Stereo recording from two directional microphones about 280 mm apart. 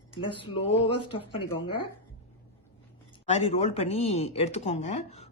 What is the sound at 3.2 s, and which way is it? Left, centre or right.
Speech, left.